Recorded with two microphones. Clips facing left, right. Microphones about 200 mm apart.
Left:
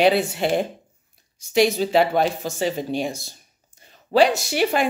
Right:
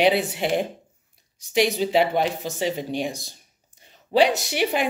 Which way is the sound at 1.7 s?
15° right (ahead or behind).